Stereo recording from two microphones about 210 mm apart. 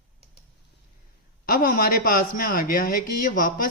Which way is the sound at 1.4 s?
45° left (ahead or behind).